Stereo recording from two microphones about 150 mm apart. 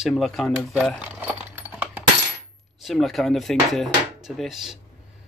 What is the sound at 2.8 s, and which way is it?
Speech, centre (ahead or behind).